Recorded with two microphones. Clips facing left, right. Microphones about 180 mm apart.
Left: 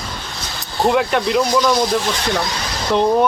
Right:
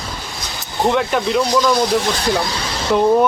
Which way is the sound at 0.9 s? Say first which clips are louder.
Left 1 dB; centre (ahead or behind).